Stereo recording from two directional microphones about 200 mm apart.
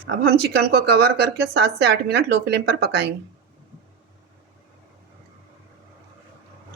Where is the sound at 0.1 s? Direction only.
55° right (ahead or behind).